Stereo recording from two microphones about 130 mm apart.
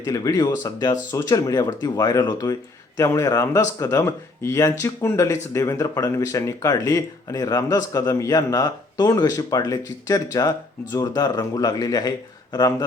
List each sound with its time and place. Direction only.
0.0 s speech: 25° left (ahead or behind)